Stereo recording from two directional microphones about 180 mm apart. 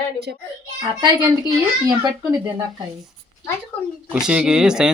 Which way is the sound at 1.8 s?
20° right (ahead or behind).